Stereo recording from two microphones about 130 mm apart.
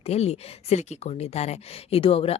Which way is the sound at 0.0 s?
55° left (ahead or behind).